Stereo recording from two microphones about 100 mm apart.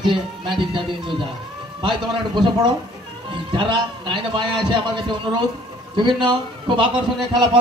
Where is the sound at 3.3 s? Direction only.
55° right (ahead or behind).